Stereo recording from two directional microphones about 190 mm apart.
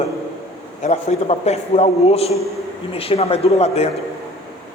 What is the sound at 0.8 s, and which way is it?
A woman's voice, 35° left (ahead or behind).